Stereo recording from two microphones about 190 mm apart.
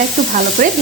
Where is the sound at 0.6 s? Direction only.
40° right (ahead or behind).